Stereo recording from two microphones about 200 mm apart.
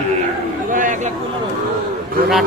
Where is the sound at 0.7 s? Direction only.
40° right (ahead or behind).